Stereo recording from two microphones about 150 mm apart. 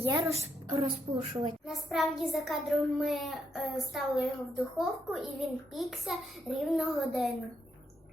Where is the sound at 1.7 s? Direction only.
Centre (ahead or behind).